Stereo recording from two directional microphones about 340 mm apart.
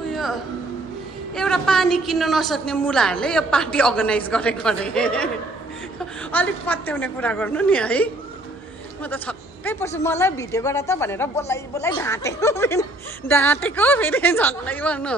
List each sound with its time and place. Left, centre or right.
0.1 s music: centre
1.3 s a woman's voice: centre